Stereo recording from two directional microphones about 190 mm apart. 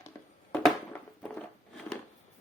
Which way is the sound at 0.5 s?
5° left (ahead or behind).